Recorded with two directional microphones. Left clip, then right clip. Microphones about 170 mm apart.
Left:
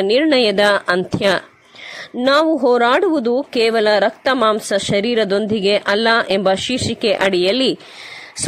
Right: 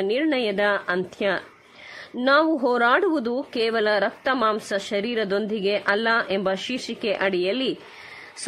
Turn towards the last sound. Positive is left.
turn(degrees=25)  # may be behind; listen again after turning